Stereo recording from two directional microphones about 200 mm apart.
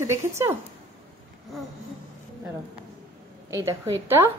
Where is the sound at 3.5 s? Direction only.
15° right (ahead or behind).